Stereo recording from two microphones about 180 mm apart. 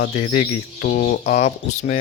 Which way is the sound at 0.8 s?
50° left (ahead or behind).